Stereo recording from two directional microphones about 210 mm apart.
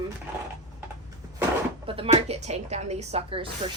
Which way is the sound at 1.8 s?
25° right (ahead or behind).